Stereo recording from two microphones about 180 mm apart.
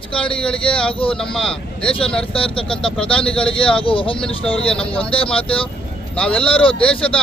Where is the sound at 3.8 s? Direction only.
30° left (ahead or behind).